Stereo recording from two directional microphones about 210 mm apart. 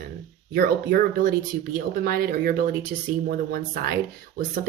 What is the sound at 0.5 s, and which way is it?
A woman's voice, 45° right (ahead or behind).